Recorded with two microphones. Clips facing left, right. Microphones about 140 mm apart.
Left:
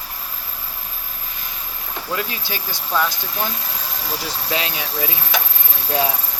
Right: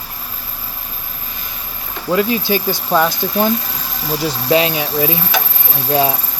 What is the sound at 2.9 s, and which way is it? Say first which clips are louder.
Speech: right 6 dB; 55° right (ahead or behind).